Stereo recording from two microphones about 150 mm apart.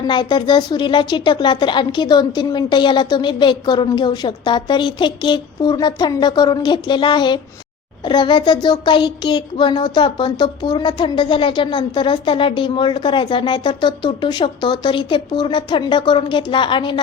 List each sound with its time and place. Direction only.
0.1 s a woman's voice: 30° left (ahead or behind)